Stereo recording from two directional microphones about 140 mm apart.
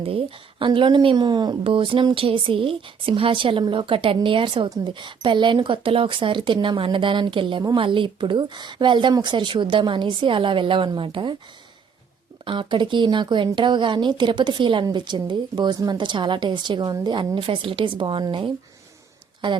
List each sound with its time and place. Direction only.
0.0 s a woman's voice: 40° right (ahead or behind)
12.5 s a woman's voice: 35° right (ahead or behind)